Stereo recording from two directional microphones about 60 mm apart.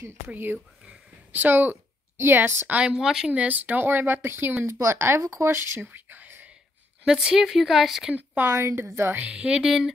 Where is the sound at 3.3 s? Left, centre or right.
Right.